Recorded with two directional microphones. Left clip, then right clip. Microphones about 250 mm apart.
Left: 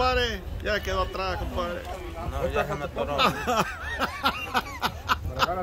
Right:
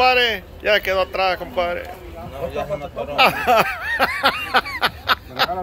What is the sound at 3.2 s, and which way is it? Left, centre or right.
Snicker, centre.